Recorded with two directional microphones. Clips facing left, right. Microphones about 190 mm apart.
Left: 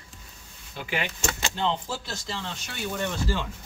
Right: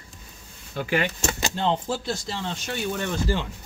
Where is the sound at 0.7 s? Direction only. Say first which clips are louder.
Right 6 dB; 45° right (ahead or behind).